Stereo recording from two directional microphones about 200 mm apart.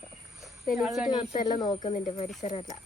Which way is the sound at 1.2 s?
35° left (ahead or behind).